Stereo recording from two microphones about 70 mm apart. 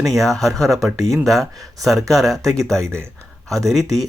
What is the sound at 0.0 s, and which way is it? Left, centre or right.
Speech, centre.